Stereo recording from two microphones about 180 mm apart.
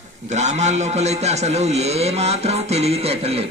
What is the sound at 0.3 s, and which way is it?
A man's voice, 40° right (ahead or behind).